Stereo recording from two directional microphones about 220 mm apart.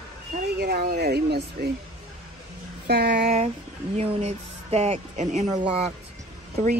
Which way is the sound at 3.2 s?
30° right (ahead or behind).